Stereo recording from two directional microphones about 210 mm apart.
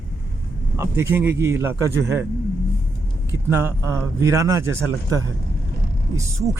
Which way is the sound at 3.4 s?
15° right (ahead or behind).